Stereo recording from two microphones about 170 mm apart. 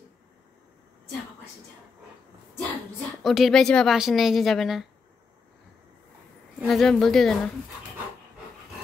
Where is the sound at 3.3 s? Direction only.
Centre (ahead or behind).